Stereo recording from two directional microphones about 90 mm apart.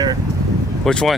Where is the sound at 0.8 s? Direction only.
5° left (ahead or behind).